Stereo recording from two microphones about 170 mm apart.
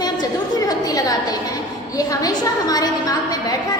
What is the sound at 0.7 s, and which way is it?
A woman's voice, 20° left (ahead or behind).